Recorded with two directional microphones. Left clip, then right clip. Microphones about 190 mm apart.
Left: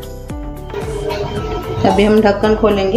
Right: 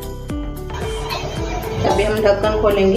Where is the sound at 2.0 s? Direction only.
55° left (ahead or behind).